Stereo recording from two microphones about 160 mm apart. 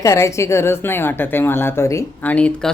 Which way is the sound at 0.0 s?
20° left (ahead or behind).